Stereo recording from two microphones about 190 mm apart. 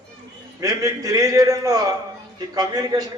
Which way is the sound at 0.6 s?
20° right (ahead or behind).